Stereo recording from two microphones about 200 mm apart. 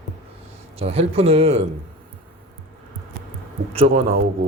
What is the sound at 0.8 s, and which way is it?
Speech, 30° right (ahead or behind).